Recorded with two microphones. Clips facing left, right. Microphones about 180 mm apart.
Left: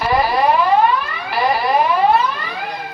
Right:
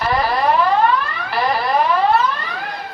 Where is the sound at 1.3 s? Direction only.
5° left (ahead or behind).